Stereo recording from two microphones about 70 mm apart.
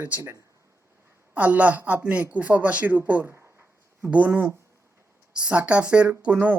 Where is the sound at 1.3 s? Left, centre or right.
Right.